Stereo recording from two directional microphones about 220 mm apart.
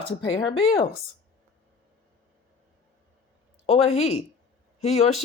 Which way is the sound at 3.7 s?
30° left (ahead or behind).